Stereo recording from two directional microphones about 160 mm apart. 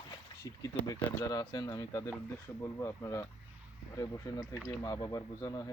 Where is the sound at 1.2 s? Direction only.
25° left (ahead or behind).